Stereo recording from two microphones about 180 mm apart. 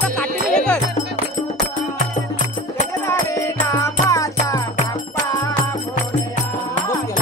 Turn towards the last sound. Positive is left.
turn(degrees=15)  # may be behind; listen again after turning